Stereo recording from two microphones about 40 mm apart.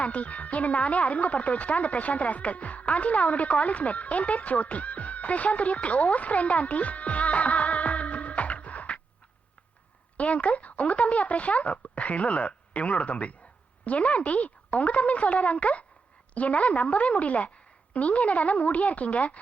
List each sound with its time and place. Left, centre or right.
0.0 s a woman's voice: left
10.2 s a woman's voice: left